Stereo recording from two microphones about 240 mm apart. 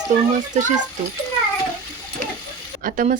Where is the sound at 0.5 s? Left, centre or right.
Right.